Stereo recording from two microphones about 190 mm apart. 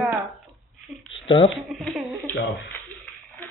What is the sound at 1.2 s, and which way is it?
Speech, 25° left (ahead or behind).